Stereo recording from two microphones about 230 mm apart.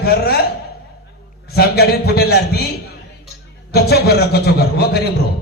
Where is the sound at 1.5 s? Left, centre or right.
Left.